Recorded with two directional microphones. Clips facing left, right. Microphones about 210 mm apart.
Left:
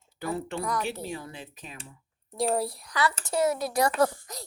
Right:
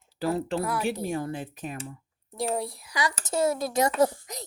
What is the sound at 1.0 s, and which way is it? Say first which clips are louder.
Speech: right 7 dB; 50° right (ahead or behind).